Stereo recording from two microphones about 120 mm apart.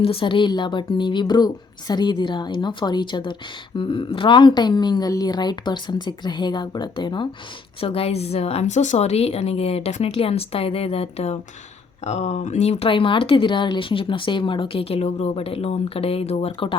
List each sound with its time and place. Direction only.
0.0 s a woman's voice: 50° left (ahead or behind)
7.8 s a woman's voice: 55° left (ahead or behind)
12.0 s speech: 70° left (ahead or behind)
12.9 s speech: 45° left (ahead or behind)